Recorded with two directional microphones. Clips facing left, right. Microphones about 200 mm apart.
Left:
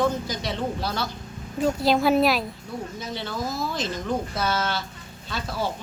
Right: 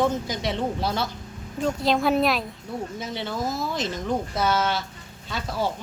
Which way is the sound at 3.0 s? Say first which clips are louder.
Right 1 dB; 25° right (ahead or behind).